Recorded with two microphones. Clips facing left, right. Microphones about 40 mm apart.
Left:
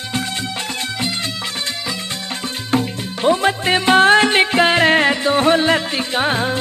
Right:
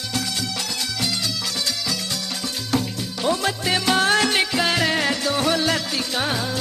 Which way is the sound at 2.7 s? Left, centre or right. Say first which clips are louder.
Left 5 dB; left.